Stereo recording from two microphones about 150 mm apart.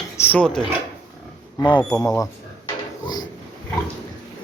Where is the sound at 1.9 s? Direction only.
25° left (ahead or behind).